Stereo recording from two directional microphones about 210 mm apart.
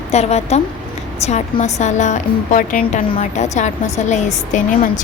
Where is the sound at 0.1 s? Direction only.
30° left (ahead or behind).